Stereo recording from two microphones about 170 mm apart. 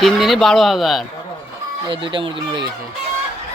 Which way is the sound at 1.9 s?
30° right (ahead or behind).